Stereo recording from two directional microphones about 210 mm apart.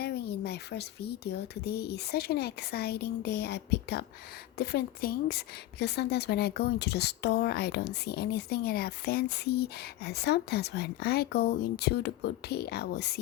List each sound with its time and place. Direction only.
0.0 s speech: 50° left (ahead or behind)